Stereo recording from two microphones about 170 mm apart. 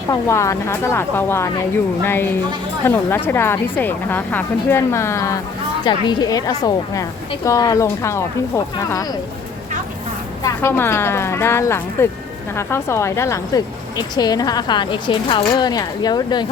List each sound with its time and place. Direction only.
0.1 s a woman's voice: 15° left (ahead or behind)
10.4 s a woman's voice: 15° left (ahead or behind)